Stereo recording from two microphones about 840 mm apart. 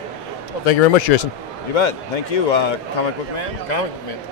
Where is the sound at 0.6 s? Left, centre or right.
Left.